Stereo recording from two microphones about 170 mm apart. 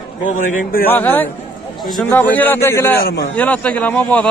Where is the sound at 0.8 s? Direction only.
10° left (ahead or behind).